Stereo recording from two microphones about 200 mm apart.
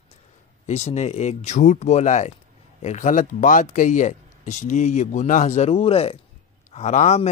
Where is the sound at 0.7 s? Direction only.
35° left (ahead or behind).